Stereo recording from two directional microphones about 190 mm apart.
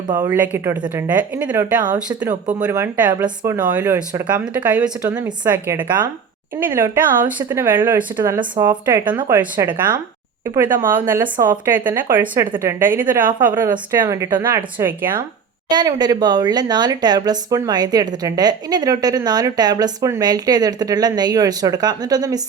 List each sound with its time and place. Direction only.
0.2 s speech: 10° right (ahead or behind)
3.9 s speech: 20° right (ahead or behind)
4.5 s speech: 5° right (ahead or behind)
10.8 s speech: 10° right (ahead or behind)
15.7 s speech: 20° right (ahead or behind)